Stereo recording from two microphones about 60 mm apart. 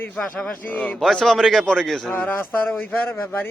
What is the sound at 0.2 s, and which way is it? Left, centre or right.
A man's voice, centre.